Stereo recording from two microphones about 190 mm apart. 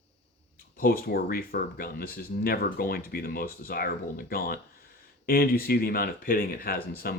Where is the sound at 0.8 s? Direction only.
50° left (ahead or behind).